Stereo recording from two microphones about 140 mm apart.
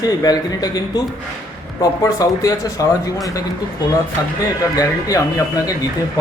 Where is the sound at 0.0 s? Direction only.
25° left (ahead or behind).